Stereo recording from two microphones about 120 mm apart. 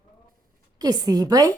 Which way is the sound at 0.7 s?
35° right (ahead or behind).